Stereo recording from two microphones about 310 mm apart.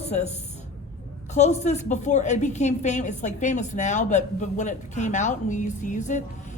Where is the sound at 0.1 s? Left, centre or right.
Left.